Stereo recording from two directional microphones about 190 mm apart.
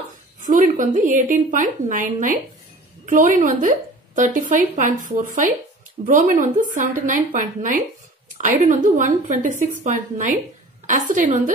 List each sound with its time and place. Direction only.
0.4 s a woman's voice: 40° right (ahead or behind)